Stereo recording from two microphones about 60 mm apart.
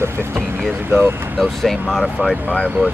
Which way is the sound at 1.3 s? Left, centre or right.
Centre.